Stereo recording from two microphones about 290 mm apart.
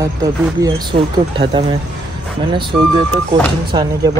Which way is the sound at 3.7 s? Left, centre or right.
Centre.